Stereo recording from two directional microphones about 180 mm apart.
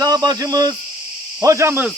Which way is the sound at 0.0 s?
20° right (ahead or behind).